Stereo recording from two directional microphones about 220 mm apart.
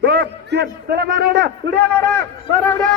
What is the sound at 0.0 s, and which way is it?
A man's voice, 50° right (ahead or behind).